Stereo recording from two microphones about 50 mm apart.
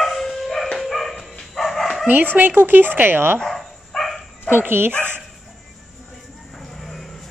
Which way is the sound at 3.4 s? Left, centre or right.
Centre.